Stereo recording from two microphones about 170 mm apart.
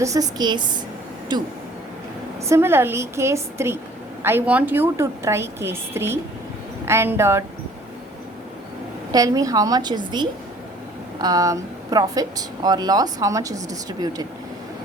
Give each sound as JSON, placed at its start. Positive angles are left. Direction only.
{"t": 0.0, "sound": "speech", "side_deg": -20}
{"t": 2.5, "sound": "a woman's voice", "side_deg": -15}
{"t": 9.1, "sound": "speech", "side_deg": -20}